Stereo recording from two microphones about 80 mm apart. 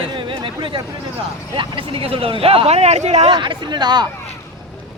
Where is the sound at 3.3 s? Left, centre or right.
Right.